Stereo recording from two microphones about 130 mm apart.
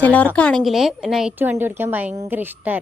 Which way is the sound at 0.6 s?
Centre (ahead or behind).